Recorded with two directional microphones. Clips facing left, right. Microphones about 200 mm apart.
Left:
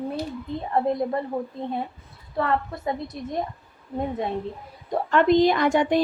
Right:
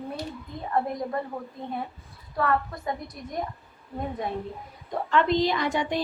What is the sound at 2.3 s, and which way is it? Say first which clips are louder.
A woman's voice: left 1 dB; 25° left (ahead or behind).